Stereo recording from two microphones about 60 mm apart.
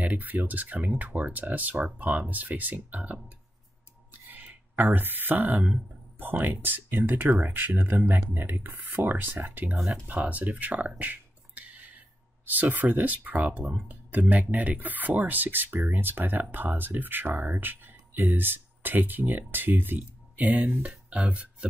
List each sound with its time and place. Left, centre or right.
0.0 s speech: right
11.0 s a sound: right
12.4 s speech: right